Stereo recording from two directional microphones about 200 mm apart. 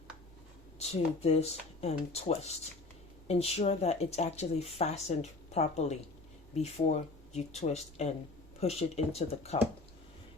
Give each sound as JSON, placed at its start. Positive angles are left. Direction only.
{"t": 0.8, "sound": "speech", "side_deg": 30}